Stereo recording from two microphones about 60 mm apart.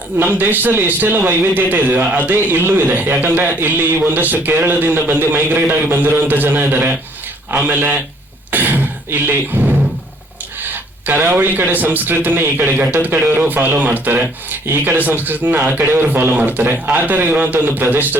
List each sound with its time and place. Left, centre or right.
0.3 s a man's voice: right
8.4 s beatboxing: right
10.6 s a man's voice: right